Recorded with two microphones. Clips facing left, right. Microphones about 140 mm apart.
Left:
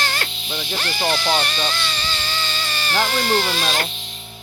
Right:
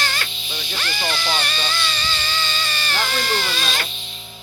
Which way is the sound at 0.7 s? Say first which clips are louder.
Left 4 dB; 30° left (ahead or behind).